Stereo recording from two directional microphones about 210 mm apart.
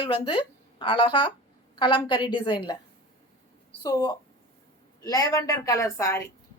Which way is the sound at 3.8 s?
15° left (ahead or behind).